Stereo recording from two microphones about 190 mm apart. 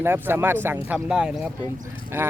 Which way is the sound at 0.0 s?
10° right (ahead or behind).